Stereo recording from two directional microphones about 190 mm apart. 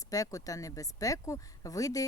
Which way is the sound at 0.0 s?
20° left (ahead or behind).